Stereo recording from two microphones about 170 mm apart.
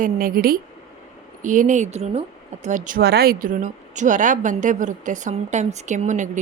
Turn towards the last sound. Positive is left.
turn(degrees=-45)  # may be behind; listen again after turning